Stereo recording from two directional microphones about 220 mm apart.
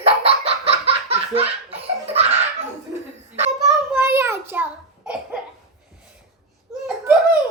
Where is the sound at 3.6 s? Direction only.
10° right (ahead or behind).